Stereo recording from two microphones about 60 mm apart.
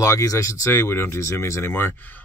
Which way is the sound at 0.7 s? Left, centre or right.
Left.